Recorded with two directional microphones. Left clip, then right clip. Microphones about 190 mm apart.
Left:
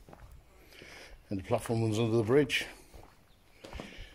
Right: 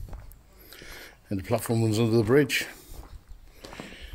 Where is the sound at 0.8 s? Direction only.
15° right (ahead or behind).